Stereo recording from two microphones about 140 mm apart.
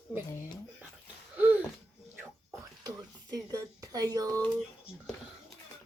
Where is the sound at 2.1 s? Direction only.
25° right (ahead or behind).